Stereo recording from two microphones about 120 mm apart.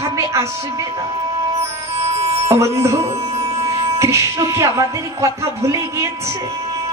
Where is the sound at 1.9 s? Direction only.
60° right (ahead or behind).